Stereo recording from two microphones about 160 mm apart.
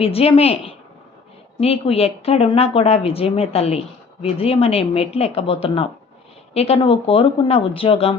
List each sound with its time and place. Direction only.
0.0 s a woman's voice: 35° left (ahead or behind)